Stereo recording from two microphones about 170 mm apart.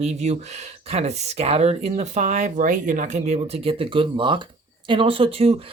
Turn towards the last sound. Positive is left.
turn(degrees=-35)  # may be behind; listen again after turning